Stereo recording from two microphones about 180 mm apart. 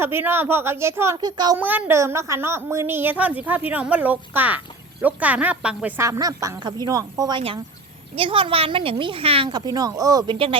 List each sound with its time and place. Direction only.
0.0 s a woman's voice: 10° right (ahead or behind)
1.5 s a woman's voice: 10° right (ahead or behind); by 10.6 s 30° right (ahead or behind)